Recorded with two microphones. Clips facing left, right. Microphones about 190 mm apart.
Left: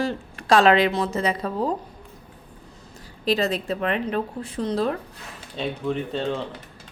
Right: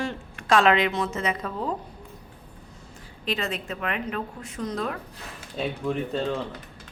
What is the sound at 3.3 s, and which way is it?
A woman's voice, 35° left (ahead or behind).